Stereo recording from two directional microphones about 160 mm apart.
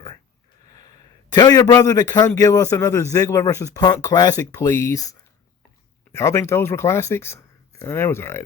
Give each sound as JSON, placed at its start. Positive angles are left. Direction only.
{"t": 1.3, "sound": "a man's voice", "side_deg": 25}